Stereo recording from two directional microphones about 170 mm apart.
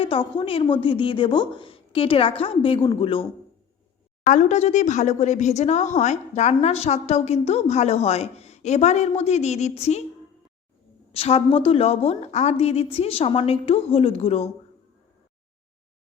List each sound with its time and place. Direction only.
0.0 s speech: 30° left (ahead or behind)
4.3 s speech: 45° left (ahead or behind)
11.1 s speech: 35° left (ahead or behind)